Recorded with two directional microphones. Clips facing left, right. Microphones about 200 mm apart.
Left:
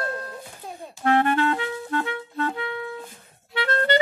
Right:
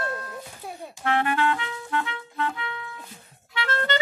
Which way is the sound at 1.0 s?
40° left (ahead or behind).